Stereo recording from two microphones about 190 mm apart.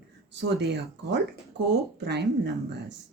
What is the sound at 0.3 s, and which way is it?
Speech, 65° right (ahead or behind).